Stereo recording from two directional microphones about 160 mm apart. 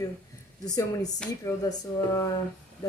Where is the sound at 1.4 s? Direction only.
20° left (ahead or behind).